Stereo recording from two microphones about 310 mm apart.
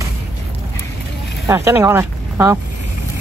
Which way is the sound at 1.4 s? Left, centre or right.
Centre.